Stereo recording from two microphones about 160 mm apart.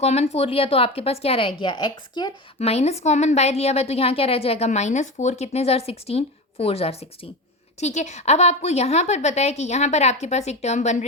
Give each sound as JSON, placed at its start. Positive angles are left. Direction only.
{"t": 0.0, "sound": "a woman's voice", "side_deg": 40}
{"t": 2.6, "sound": "a woman's voice", "side_deg": 40}